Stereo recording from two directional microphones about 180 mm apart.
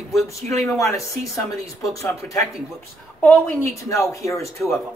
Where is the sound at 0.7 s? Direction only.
15° left (ahead or behind).